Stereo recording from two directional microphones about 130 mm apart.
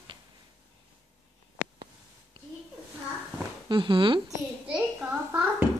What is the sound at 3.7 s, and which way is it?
Speech, 40° right (ahead or behind).